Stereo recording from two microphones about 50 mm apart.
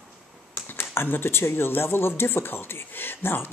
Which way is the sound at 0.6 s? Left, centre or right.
Left.